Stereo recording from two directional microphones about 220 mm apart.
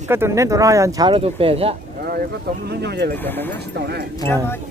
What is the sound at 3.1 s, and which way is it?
Speech, 10° left (ahead or behind).